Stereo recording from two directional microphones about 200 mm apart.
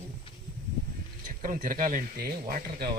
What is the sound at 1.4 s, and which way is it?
A man's voice, 45° right (ahead or behind).